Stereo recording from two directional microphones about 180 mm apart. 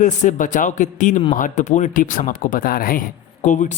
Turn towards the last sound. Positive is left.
turn(degrees=45)  # may be behind; listen again after turning